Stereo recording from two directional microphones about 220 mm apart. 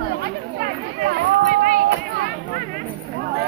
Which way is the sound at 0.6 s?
40° right (ahead or behind).